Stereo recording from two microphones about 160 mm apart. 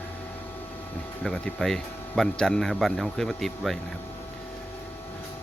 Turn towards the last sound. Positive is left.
turn(degrees=0)  # may be behind; listen again after turning